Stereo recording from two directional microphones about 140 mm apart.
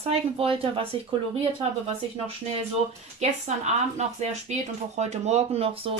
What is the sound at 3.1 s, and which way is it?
Speech, 55° right (ahead or behind).